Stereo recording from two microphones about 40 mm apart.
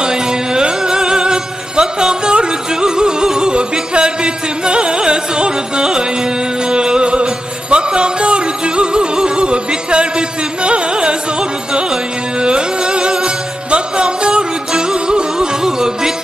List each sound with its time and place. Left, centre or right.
0.0 s music: centre